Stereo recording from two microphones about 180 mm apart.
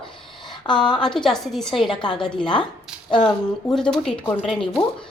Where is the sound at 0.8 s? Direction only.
25° left (ahead or behind).